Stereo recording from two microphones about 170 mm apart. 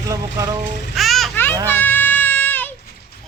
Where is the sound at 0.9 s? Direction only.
Centre (ahead or behind).